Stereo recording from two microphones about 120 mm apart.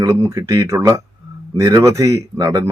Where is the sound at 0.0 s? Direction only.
25° right (ahead or behind).